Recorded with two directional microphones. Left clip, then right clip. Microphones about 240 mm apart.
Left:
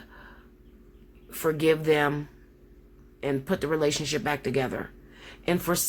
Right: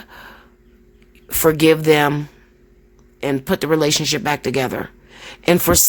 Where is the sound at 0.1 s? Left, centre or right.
Right.